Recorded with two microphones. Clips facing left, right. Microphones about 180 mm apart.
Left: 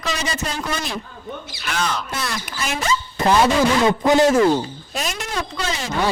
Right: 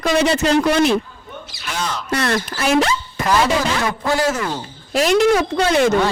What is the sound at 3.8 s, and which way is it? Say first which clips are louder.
Speech: left 4 dB; 20° left (ahead or behind).